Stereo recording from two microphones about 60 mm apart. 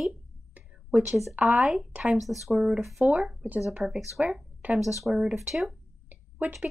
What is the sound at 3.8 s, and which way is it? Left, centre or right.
Speech, centre.